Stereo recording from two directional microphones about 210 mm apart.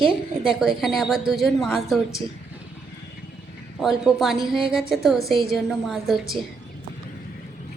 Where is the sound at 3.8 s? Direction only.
Centre (ahead or behind).